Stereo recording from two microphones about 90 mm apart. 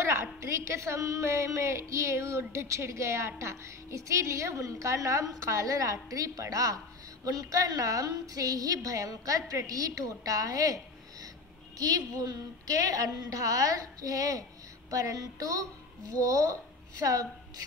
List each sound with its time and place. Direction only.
0.0 s a woman's voice: 30° right (ahead or behind)
11.8 s a woman's voice: 45° right (ahead or behind)